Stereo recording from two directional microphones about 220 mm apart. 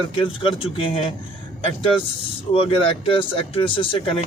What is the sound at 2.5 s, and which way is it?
A man's voice, 25° left (ahead or behind).